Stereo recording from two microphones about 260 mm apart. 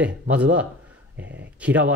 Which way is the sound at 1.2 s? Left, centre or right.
Right.